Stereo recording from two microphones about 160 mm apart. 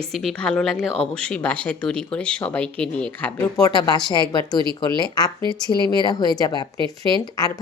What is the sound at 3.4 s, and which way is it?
Speech, 25° left (ahead or behind).